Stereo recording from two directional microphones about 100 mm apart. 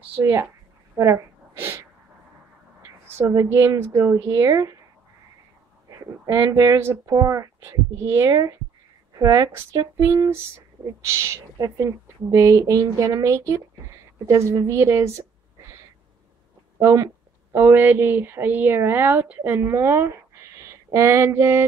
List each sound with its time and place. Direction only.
0.2 s speech: 30° right (ahead or behind)
0.9 s a sound: 30° right (ahead or behind)
3.2 s a woman's voice: 25° right (ahead or behind)
5.9 s speech: 35° right (ahead or behind)
16.8 s speech: 30° right (ahead or behind)